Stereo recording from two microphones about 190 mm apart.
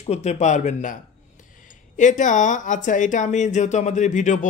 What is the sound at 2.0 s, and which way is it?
Speech, 40° left (ahead or behind).